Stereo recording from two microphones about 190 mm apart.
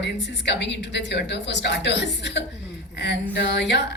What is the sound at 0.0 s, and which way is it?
A woman's voice, 65° left (ahead or behind).